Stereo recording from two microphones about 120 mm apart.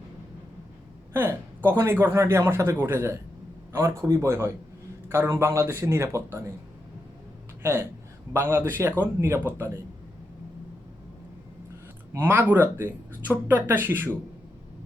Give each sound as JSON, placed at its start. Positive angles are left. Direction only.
{"t": 1.1, "sound": "speech", "side_deg": -20}
{"t": 7.6, "sound": "speech", "side_deg": -20}
{"t": 12.1, "sound": "speech", "side_deg": -15}